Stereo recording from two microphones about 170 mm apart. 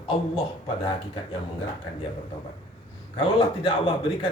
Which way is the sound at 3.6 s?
30° left (ahead or behind).